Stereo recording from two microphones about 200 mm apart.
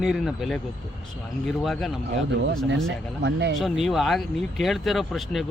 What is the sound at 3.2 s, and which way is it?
Speech, 60° right (ahead or behind).